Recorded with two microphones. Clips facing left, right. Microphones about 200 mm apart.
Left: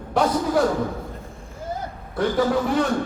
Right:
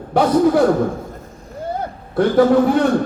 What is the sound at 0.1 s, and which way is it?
Speech, 60° right (ahead or behind).